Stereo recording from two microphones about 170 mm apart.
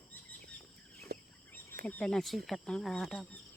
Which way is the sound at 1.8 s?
5° left (ahead or behind).